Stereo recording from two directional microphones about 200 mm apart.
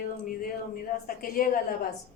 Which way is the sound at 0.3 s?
45° left (ahead or behind).